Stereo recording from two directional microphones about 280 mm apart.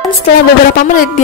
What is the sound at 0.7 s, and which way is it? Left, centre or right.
Speech, left.